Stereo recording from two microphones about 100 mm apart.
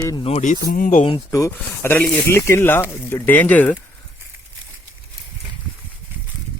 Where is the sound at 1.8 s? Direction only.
25° left (ahead or behind).